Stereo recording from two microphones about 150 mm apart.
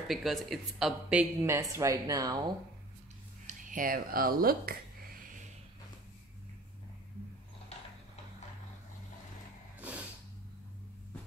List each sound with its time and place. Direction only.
0.1 s speech: centre (ahead or behind)
1.4 s speech: 15° right (ahead or behind)
3.4 s a sound: 65° right (ahead or behind)
9.8 s vehicle: 10° right (ahead or behind)